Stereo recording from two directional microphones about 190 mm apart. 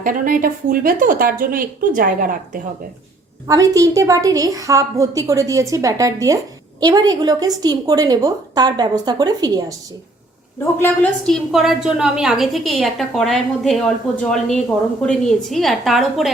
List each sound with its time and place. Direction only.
0.0 s a woman's voice: 45° right (ahead or behind)
3.4 s a woman's voice: 20° right (ahead or behind)
10.6 s a woman's voice: 10° left (ahead or behind)
11.3 s a woman's voice: centre (ahead or behind)